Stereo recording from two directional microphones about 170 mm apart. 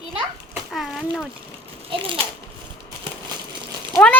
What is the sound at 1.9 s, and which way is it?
Speech, 30° right (ahead or behind).